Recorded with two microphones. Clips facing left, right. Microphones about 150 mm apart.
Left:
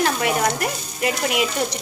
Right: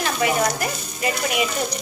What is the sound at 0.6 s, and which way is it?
Stir, 65° left (ahead or behind).